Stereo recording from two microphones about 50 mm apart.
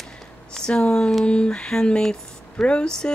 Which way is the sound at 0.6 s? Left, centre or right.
Centre.